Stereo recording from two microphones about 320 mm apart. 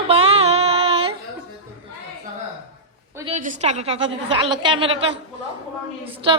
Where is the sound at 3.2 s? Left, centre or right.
Right.